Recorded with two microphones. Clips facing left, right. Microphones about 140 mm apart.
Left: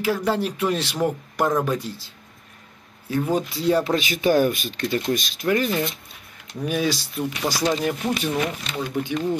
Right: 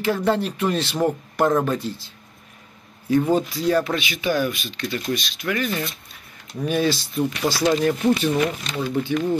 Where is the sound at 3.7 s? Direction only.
25° left (ahead or behind).